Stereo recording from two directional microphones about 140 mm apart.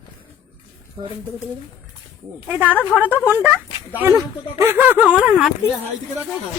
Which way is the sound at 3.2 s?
20° right (ahead or behind).